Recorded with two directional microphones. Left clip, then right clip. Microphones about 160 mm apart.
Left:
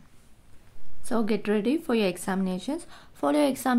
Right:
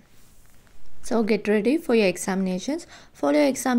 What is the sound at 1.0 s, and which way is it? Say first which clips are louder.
A woman's voice: right 5 dB; 15° right (ahead or behind).